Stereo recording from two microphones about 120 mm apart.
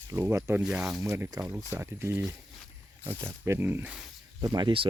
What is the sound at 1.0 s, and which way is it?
Speech, 25° right (ahead or behind).